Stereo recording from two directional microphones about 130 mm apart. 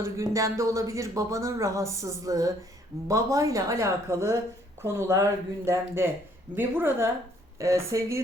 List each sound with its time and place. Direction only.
0.0 s speech: 25° right (ahead or behind)